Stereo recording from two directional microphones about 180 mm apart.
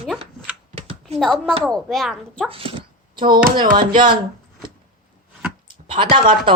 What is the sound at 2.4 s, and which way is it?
Speech, 30° right (ahead or behind).